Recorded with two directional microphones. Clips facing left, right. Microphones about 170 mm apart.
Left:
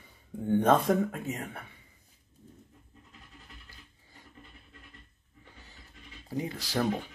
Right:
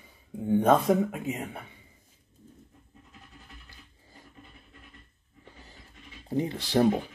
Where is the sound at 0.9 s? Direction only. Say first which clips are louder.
Right 2 dB; 10° right (ahead or behind).